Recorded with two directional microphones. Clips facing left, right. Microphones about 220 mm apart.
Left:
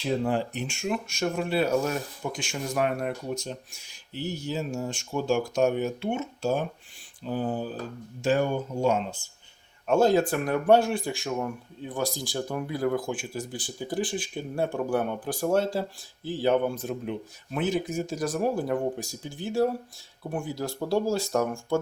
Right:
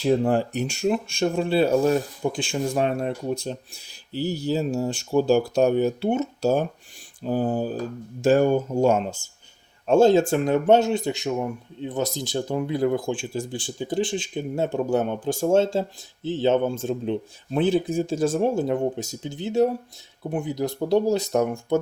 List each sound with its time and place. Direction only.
0.0 s speech: 45° right (ahead or behind)
9.8 s speech: 30° right (ahead or behind)